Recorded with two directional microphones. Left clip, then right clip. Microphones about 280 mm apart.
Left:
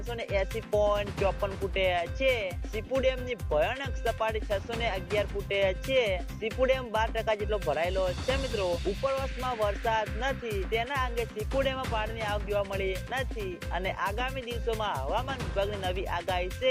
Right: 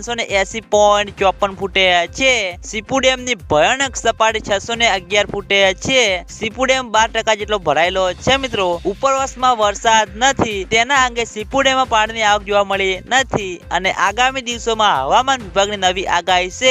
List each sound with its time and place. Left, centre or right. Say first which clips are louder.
0.1 s speech: right 13 dB; right